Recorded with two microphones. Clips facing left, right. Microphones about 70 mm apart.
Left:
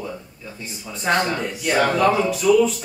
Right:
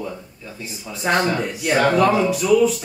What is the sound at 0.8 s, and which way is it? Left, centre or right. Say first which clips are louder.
Speech: right 1 dB; centre.